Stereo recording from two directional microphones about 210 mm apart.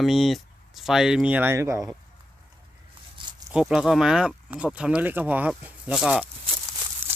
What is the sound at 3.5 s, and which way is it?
Speech, centre (ahead or behind).